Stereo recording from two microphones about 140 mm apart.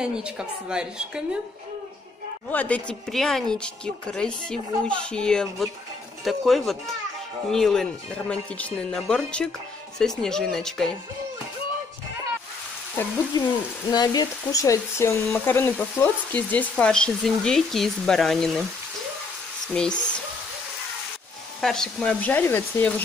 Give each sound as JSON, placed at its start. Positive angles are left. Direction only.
{"t": 0.0, "sound": "speech", "side_deg": -5}
{"t": 2.5, "sound": "speech", "side_deg": 10}
{"t": 13.3, "sound": "speech", "side_deg": 30}
{"t": 19.7, "sound": "speech", "side_deg": 5}
{"t": 21.5, "sound": "speech", "side_deg": 0}